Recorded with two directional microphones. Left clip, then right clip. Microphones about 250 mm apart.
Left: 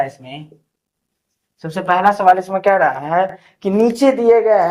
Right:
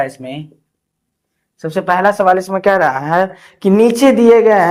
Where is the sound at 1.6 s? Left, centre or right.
Right.